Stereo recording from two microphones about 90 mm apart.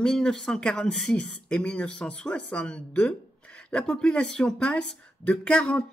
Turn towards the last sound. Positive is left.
turn(degrees=10)  # may be behind; listen again after turning